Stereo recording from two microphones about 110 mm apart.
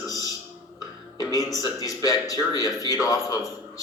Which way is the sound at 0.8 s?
35° left (ahead or behind).